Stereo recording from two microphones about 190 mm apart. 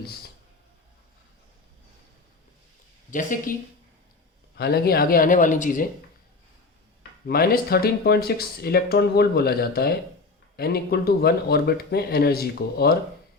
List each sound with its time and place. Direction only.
3.1 s speech: 45° left (ahead or behind)
4.5 s speech: 60° left (ahead or behind)
7.3 s speech: 55° left (ahead or behind)